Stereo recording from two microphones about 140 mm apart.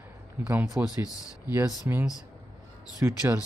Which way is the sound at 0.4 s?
10° right (ahead or behind).